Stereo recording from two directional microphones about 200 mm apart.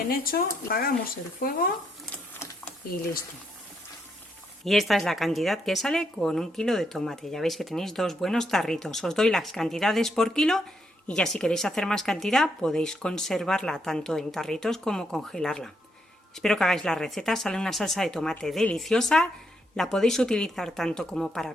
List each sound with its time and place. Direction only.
0.0 s speech: 50° left (ahead or behind)
4.6 s a woman's voice: centre (ahead or behind)